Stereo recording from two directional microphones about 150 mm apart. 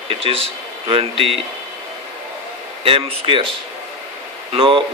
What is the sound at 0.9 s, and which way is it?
Speech, 40° right (ahead or behind).